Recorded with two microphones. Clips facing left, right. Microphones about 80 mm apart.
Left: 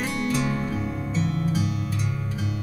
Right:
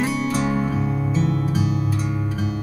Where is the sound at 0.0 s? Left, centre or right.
Centre.